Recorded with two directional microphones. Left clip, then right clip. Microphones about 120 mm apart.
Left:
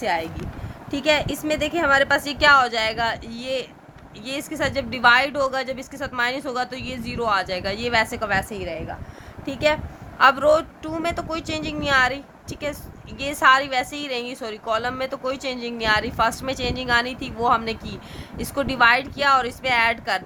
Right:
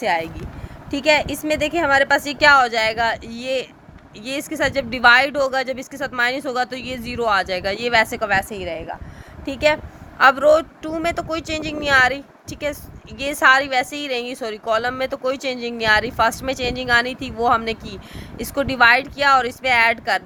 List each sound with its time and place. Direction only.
0.0 s a woman's voice: 50° right (ahead or behind)